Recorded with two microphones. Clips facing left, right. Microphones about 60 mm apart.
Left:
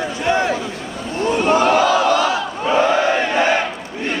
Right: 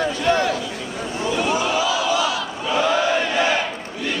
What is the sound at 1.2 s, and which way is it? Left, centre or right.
Battle cry, left.